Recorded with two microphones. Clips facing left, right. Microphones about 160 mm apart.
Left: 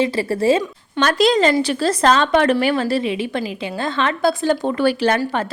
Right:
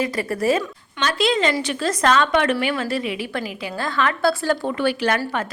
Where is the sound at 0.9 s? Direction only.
40° left (ahead or behind); by 4.7 s 20° left (ahead or behind).